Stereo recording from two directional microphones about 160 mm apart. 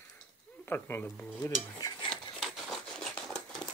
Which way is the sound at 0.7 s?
15° left (ahead or behind).